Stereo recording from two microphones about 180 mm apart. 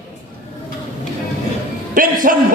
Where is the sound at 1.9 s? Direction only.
50° right (ahead or behind).